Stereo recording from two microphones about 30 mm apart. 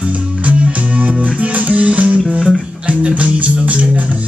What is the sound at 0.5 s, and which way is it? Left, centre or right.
Music, right.